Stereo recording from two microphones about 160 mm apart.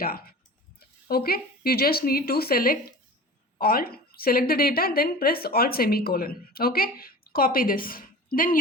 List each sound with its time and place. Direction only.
0.0 s a woman's voice: 70° left (ahead or behind)